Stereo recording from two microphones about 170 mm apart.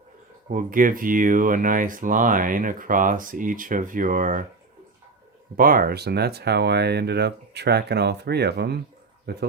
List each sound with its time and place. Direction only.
0.4 s speech: 55° right (ahead or behind)
5.5 s speech: 55° right (ahead or behind); by 9.5 s 75° right (ahead or behind)